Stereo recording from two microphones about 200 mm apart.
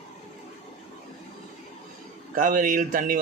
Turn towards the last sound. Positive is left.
turn(degrees=-45)  # may be behind; listen again after turning